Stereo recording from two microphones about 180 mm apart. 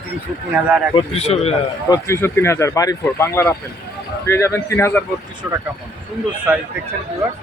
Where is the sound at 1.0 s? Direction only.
35° left (ahead or behind).